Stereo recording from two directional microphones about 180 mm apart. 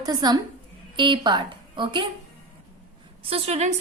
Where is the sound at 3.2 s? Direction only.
35° right (ahead or behind).